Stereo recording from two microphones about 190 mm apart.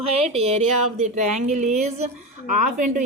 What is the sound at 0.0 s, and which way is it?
A woman's voice, 35° right (ahead or behind).